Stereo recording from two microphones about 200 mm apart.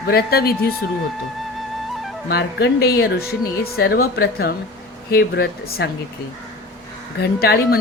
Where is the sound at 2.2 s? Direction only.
55° left (ahead or behind).